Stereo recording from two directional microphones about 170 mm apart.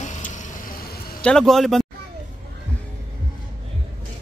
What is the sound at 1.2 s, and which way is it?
Speech, 5° left (ahead or behind).